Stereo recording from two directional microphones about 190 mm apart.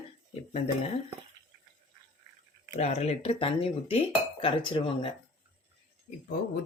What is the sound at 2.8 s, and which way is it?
Speech, 35° left (ahead or behind).